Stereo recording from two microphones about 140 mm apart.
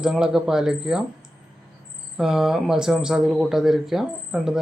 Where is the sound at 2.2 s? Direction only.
5° right (ahead or behind).